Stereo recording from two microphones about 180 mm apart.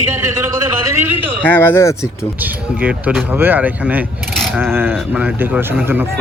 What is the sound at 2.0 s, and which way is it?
Speech, 5° right (ahead or behind).